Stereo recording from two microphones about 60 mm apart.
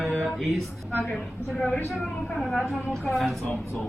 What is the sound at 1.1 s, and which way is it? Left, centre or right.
Speech, centre.